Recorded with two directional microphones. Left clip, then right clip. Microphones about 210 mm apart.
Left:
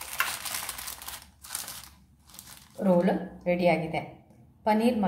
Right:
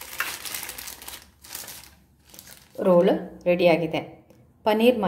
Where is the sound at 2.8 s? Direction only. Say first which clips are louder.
Right 6 dB; 40° right (ahead or behind).